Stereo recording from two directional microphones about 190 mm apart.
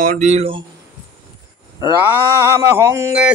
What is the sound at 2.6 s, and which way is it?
Speech, 15° right (ahead or behind).